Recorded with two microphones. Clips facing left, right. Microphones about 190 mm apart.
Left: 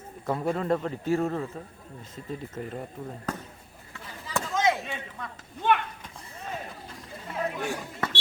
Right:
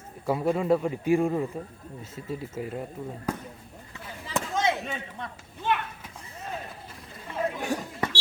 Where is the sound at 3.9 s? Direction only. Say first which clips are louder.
Right 1 dB; 20° right (ahead or behind).